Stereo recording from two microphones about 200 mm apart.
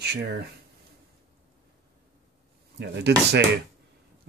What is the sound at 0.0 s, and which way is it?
Speech, 55° right (ahead or behind).